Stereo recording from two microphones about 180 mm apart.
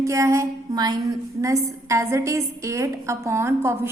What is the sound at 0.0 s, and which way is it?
A woman's voice, 15° right (ahead or behind).